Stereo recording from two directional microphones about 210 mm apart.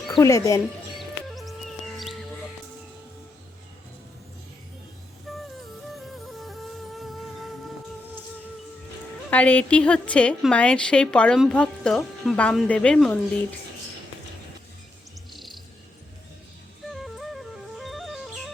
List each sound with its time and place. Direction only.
0.1 s speech: 15° left (ahead or behind)
0.9 s music: centre (ahead or behind)
5.3 s music: centre (ahead or behind)
9.3 s a woman's voice: 5° left (ahead or behind)
15.3 s bird: centre (ahead or behind)
16.9 s music: centre (ahead or behind)